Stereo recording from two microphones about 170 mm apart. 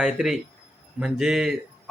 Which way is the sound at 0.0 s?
5° right (ahead or behind).